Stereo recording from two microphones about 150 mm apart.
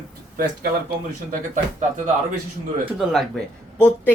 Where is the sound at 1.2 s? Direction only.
60° right (ahead or behind).